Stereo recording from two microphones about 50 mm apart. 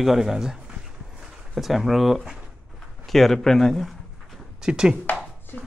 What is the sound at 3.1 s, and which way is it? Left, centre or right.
Speech, centre.